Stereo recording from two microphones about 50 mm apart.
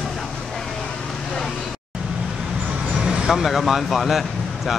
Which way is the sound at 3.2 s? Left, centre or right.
Centre.